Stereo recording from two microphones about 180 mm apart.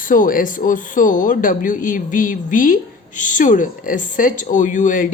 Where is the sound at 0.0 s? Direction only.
50° left (ahead or behind).